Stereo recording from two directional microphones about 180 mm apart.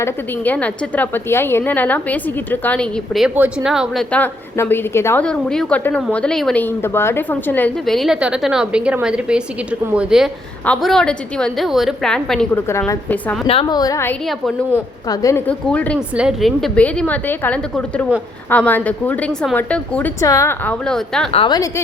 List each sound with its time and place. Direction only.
0.0 s a woman's voice: 10° left (ahead or behind)
3.2 s a woman's voice: 5° right (ahead or behind)
4.1 s a woman's voice: 10° left (ahead or behind)
12.6 s a woman's voice: 15° left (ahead or behind)
13.5 s a woman's voice: 25° left (ahead or behind); by 16.0 s 5° left (ahead or behind)
16.0 s a woman's voice: 5° right (ahead or behind)
21.3 s a woman's voice: 25° left (ahead or behind)